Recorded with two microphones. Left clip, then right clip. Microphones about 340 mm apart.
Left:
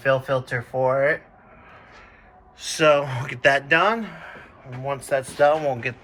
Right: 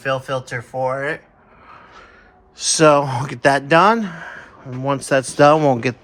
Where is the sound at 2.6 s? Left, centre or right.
Centre.